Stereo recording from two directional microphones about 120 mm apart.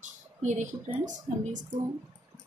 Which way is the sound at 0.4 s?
90° right.